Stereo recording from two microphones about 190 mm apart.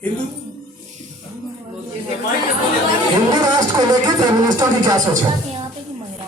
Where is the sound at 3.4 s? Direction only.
20° right (ahead or behind).